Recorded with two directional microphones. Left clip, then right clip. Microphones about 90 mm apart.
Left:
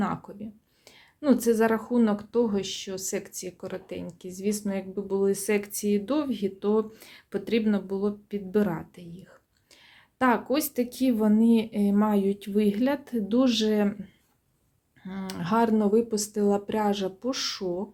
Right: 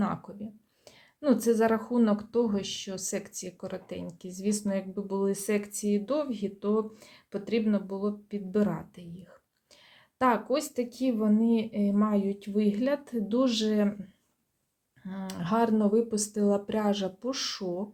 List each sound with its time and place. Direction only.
0.0 s speech: 20° left (ahead or behind)
5.4 s speech: 25° left (ahead or behind)
9.0 s speech: 20° left (ahead or behind)
10.5 s speech: 40° left (ahead or behind); by 17.8 s 15° left (ahead or behind)